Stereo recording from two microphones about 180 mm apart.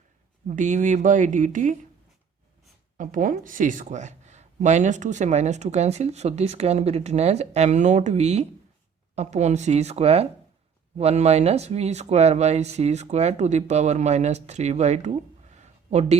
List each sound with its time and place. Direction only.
0.4 s speech: 45° right (ahead or behind)
3.0 s speech: 50° right (ahead or behind)